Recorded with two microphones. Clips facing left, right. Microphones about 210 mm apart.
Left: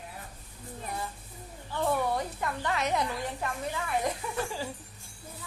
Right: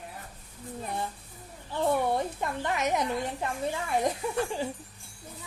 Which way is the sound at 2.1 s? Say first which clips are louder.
Right 2 dB; 25° right (ahead or behind).